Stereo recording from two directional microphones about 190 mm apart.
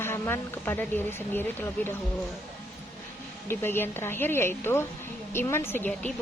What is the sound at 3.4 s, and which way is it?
A woman's voice, 10° left (ahead or behind).